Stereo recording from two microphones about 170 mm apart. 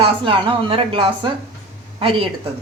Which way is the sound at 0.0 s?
30° right (ahead or behind).